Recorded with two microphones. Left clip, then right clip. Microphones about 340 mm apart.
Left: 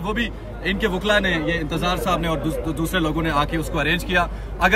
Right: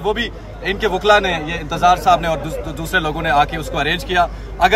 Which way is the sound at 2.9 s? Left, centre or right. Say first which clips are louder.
Right 7 dB; centre.